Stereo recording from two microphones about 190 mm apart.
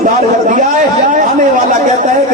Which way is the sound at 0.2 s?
40° right (ahead or behind).